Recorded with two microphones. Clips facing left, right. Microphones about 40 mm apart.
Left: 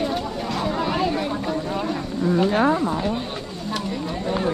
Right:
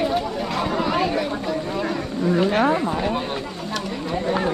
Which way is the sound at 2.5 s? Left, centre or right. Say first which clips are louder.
Even; right.